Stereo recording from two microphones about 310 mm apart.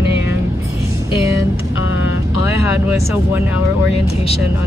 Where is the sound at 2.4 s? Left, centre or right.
Centre.